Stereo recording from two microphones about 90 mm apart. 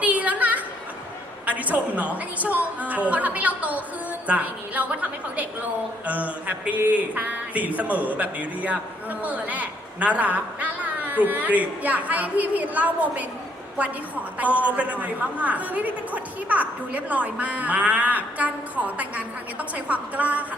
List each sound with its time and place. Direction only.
0.0 s a sound: 15° right (ahead or behind)
1.5 s speech: 15° right (ahead or behind)
14.3 s speech: 15° right (ahead or behind)